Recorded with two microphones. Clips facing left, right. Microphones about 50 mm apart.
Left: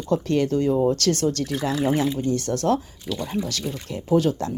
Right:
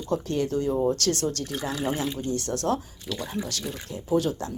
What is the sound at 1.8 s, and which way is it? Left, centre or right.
Speech, left.